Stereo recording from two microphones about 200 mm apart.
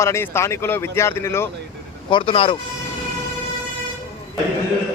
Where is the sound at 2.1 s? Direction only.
25° left (ahead or behind).